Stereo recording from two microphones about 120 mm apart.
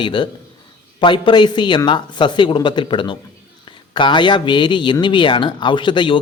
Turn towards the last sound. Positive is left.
turn(degrees=40)  # may be behind; listen again after turning